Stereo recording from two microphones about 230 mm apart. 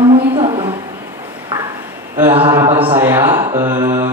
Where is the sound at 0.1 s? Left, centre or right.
Right.